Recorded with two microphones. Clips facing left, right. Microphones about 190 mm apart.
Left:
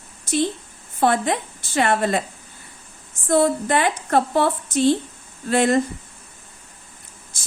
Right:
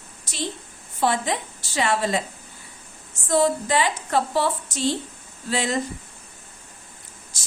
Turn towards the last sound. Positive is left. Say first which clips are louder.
# left 8 dB
turn(degrees=55)  # may be behind; listen again after turning